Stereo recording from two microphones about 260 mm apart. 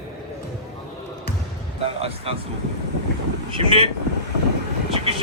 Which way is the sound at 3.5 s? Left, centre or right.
Right.